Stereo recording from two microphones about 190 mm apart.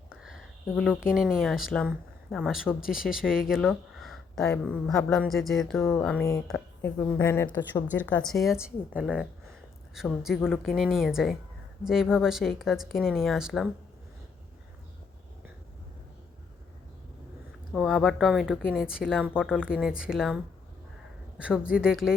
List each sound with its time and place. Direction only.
0.1 s a sound: centre (ahead or behind)
1.1 s speech: centre (ahead or behind)
2.9 s speech: 50° left (ahead or behind)
3.5 s speech: centre (ahead or behind)
5.7 s a woman's voice: 10° left (ahead or behind)
17.7 s a woman's voice: centre (ahead or behind)